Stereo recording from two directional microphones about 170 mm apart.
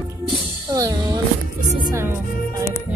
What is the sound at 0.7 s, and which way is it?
Music, 20° right (ahead or behind).